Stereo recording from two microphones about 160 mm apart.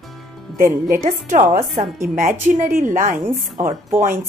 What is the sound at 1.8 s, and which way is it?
Speech, 50° right (ahead or behind).